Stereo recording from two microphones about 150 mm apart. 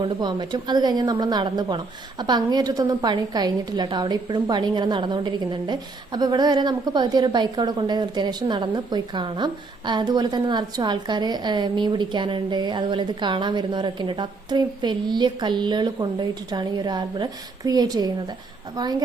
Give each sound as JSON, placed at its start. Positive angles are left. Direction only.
{"t": 0.0, "sound": "a woman's voice", "side_deg": -30}